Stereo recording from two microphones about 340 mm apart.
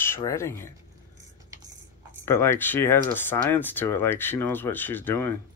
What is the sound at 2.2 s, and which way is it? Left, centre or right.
Speech, centre.